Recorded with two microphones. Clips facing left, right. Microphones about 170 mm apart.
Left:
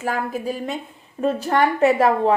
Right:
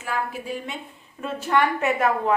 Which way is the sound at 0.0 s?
40° left (ahead or behind).